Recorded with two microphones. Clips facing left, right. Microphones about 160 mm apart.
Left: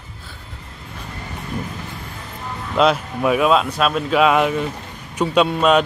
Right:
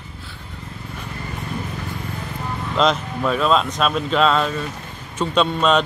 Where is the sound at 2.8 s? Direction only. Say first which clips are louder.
Left 3 dB; 10° left (ahead or behind).